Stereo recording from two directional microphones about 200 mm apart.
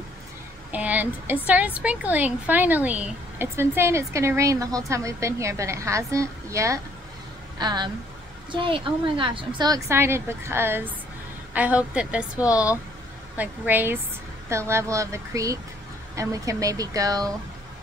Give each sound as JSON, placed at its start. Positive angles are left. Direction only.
{"t": 0.7, "sound": "a woman's voice", "side_deg": -10}